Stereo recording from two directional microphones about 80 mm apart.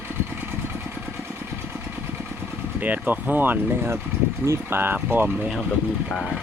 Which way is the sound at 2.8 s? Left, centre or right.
Centre.